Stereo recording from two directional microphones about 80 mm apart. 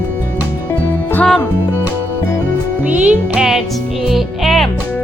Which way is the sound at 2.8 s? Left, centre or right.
Centre.